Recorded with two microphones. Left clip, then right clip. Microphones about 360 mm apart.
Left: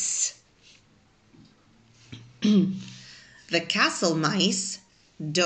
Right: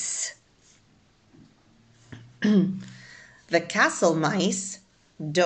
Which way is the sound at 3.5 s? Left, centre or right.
Right.